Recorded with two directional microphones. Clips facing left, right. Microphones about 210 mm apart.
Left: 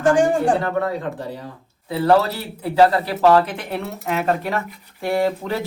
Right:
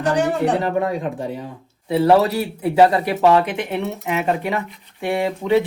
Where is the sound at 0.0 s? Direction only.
45° left (ahead or behind).